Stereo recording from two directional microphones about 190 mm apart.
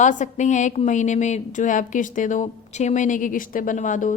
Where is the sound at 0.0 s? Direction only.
40° left (ahead or behind).